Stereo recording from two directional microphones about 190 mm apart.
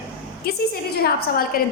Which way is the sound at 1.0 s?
50° left (ahead or behind).